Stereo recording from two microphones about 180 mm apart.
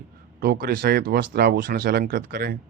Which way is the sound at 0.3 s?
55° right (ahead or behind).